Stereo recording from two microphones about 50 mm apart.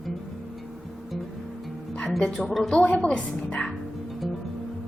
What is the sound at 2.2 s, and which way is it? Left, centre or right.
Speech, centre.